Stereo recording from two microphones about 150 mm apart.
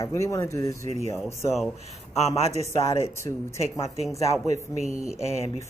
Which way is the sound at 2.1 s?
45° left (ahead or behind).